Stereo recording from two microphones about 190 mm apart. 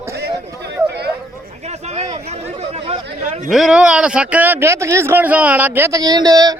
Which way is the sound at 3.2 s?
45° right (ahead or behind).